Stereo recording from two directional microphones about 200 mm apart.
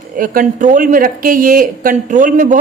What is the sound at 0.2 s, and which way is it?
A woman's voice, 40° right (ahead or behind).